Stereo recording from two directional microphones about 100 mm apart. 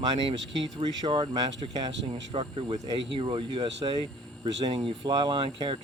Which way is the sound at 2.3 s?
60° right (ahead or behind).